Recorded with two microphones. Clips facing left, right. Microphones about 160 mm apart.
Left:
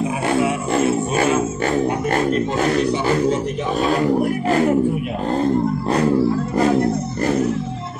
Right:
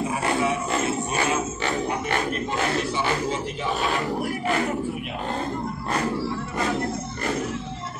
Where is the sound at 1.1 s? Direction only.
45° left (ahead or behind).